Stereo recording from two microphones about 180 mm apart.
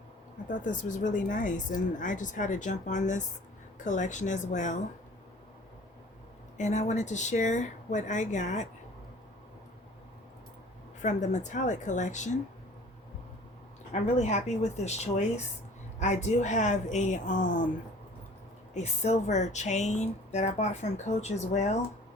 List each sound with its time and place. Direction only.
0.4 s speech: 45° left (ahead or behind)
6.6 s speech: 40° left (ahead or behind)
11.0 s speech: 40° left (ahead or behind)
13.9 s speech: 40° left (ahead or behind)
18.7 s speech: 40° left (ahead or behind)